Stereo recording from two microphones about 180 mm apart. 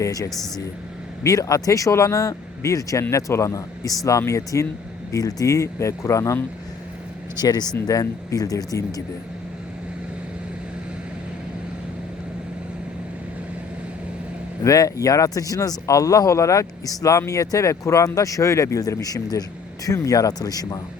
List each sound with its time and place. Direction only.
0.0 s speech: 20° left (ahead or behind)
0.3 s speech: centre (ahead or behind)
1.2 s speech: 20° left (ahead or behind)
14.6 s speech: 20° left (ahead or behind)